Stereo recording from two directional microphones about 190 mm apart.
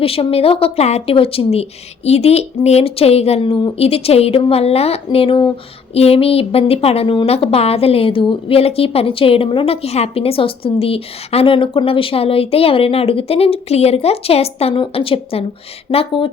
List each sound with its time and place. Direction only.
0.0 s a woman's voice: 30° left (ahead or behind)